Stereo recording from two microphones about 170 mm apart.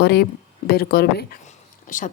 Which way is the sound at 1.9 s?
50° left (ahead or behind).